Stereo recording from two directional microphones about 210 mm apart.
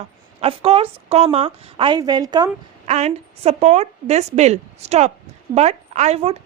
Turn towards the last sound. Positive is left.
turn(degrees=-30)  # may be behind; listen again after turning